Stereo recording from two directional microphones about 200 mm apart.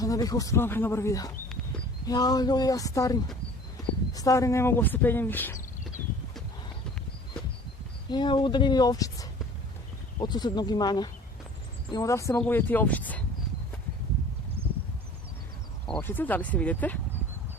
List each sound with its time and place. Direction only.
0.0 s speech: 15° left (ahead or behind)
8.1 s speech: 20° left (ahead or behind)
15.9 s speech: 10° left (ahead or behind)